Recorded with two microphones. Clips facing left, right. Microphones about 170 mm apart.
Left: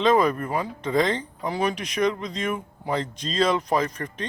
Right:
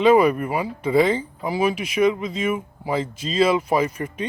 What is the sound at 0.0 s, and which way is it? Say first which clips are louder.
Speech: right 4 dB; 10° right (ahead or behind).